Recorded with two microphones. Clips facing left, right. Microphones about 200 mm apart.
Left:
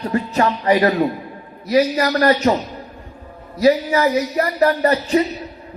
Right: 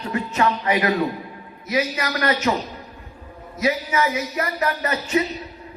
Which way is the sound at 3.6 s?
35° left (ahead or behind).